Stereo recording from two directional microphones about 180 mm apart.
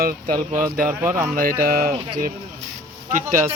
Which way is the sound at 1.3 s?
55° right (ahead or behind).